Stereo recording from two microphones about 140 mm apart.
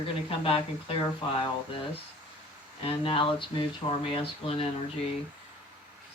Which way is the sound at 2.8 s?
40° left (ahead or behind).